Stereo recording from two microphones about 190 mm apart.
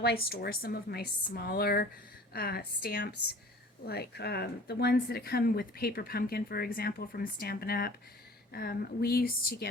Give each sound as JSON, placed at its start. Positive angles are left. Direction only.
{"t": 0.0, "sound": "speech", "side_deg": 55}